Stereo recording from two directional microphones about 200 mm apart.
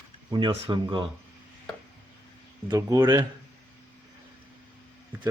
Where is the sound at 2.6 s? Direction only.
15° right (ahead or behind).